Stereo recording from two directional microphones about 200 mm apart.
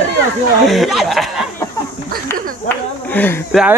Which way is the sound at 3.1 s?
10° left (ahead or behind).